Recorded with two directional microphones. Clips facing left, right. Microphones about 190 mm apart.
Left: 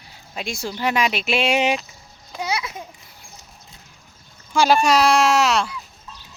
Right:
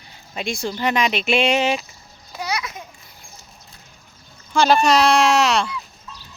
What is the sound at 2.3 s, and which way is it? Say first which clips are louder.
Children playing: left 1 dB; 25° left (ahead or behind).